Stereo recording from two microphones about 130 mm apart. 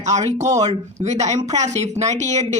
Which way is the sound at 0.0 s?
60° right (ahead or behind).